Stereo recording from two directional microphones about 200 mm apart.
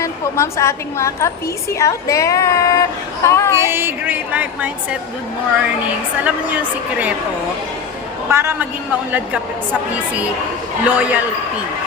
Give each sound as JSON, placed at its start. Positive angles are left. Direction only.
{"t": 0.0, "sound": "a woman's voice", "side_deg": 15}
{"t": 3.6, "sound": "a woman's voice", "side_deg": -10}
{"t": 6.2, "sound": "a woman's voice", "side_deg": -10}
{"t": 8.3, "sound": "a woman's voice", "side_deg": -10}
{"t": 10.8, "sound": "a woman's voice", "side_deg": -5}